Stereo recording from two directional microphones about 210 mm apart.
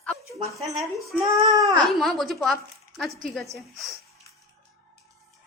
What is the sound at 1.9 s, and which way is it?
Speech, centre (ahead or behind).